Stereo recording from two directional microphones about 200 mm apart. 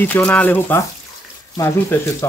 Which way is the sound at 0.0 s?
5° left (ahead or behind).